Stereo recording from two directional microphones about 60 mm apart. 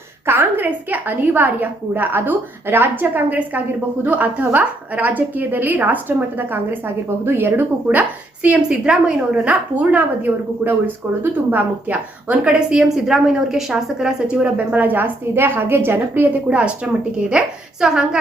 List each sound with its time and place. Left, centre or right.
0.3 s a woman's voice: right
7.9 s a woman's voice: right
12.3 s a woman's voice: centre
14.4 s a woman's voice: right
16.5 s a woman's voice: centre